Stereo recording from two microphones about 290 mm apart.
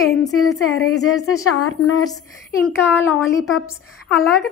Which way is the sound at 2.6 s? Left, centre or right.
Centre.